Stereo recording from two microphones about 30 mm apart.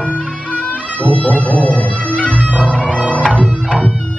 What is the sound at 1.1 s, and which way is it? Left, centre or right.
Music, left.